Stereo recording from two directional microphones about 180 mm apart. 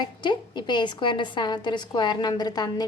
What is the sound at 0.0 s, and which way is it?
A woman's voice, 25° left (ahead or behind).